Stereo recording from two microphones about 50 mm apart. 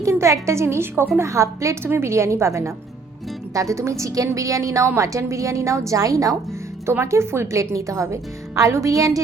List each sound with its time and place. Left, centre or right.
0.0 s music: right
0.4 s a woman's voice: right
1.2 s a woman's voice: right
7.0 s a woman's voice: right